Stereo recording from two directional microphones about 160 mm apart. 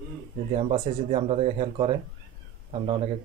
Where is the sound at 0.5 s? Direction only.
40° right (ahead or behind).